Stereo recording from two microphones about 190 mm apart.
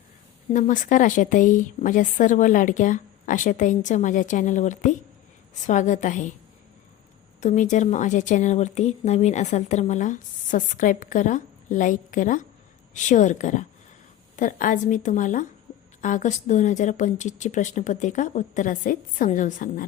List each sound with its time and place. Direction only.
0.5 s speech: 40° left (ahead or behind)
7.4 s a woman's voice: 40° left (ahead or behind)